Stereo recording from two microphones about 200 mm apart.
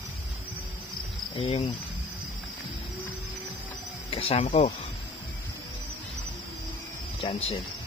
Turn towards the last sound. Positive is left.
turn(degrees=30)  # may be behind; listen again after turning